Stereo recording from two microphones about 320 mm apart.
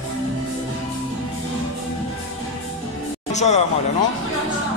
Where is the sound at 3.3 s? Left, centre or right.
Left.